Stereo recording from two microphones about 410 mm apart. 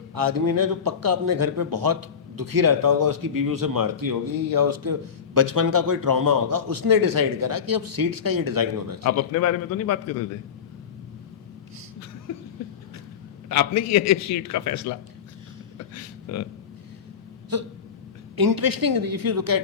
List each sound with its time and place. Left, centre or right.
0.1 s a man's voice: right
9.0 s a man's voice: left
13.5 s a man's voice: left
17.5 s speech: right